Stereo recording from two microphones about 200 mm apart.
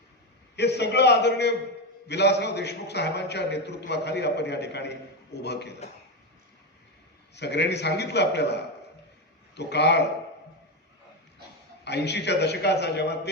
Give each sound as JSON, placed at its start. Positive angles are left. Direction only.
{"t": 0.5, "sound": "a man's voice", "side_deg": 55}
{"t": 7.3, "sound": "a man's voice", "side_deg": 55}
{"t": 9.6, "sound": "a man's voice", "side_deg": 55}
{"t": 11.9, "sound": "a man's voice", "side_deg": 60}